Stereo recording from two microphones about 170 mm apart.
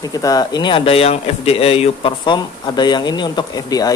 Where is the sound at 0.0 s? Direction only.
20° left (ahead or behind).